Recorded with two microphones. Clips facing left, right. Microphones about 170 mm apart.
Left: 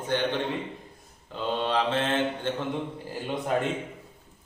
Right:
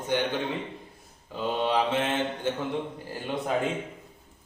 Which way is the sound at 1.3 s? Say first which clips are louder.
Right 1 dB; 10° right (ahead or behind).